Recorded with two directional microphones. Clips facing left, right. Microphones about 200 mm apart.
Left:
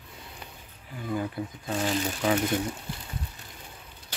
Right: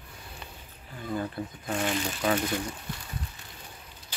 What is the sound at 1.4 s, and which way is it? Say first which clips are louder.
Speech: left 1 dB; 15° left (ahead or behind).